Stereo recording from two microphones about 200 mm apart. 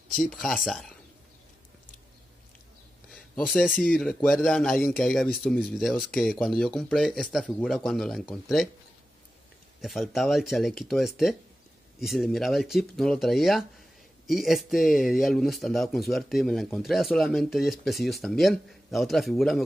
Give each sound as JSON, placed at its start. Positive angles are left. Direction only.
{"t": 0.1, "sound": "speech", "side_deg": 0}
{"t": 3.1, "sound": "speech", "side_deg": 0}
{"t": 9.8, "sound": "speech", "side_deg": 0}